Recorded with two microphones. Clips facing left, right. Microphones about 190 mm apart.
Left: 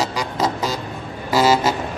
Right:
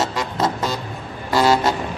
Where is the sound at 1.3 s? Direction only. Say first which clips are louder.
Even; centre (ahead or behind).